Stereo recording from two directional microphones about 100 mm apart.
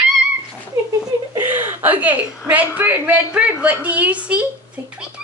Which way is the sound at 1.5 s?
15° right (ahead or behind).